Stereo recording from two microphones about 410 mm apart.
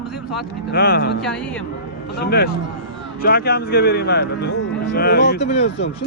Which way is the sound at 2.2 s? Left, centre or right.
Left.